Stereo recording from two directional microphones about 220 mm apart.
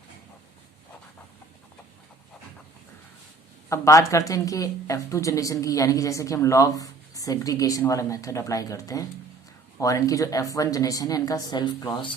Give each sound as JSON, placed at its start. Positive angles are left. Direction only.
{"t": 3.7, "sound": "speech", "side_deg": 15}